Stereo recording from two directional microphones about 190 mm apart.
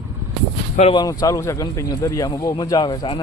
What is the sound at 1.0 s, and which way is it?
Speech, 20° left (ahead or behind).